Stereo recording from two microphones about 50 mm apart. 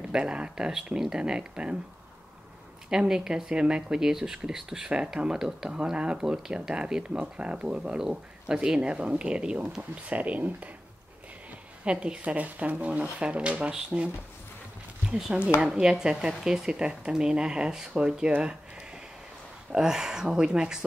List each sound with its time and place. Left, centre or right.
0.0 s speech: centre
2.9 s speech: centre; by 10.7 s right
11.8 s speech: right
13.7 s speech: centre
15.0 s speech: centre